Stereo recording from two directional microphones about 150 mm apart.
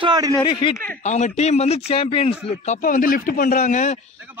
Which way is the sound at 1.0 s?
50° left (ahead or behind).